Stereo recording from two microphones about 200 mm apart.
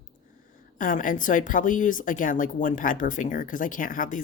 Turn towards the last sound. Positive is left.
turn(degrees=40)  # may be behind; listen again after turning